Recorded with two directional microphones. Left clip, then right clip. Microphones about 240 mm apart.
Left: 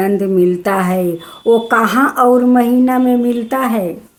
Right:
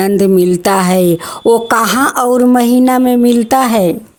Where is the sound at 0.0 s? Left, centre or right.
Right.